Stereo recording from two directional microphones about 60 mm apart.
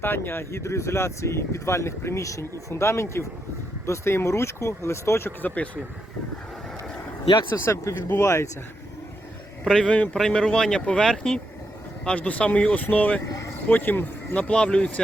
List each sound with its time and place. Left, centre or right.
0.0 s speech: left
2.4 s speech: left
5.4 s speech: left
7.5 s speech: left
9.6 s speech: centre
9.9 s speech: centre
12.0 s speech: left
13.2 s vehicle: left
13.7 s speech: left
14.3 s speech: centre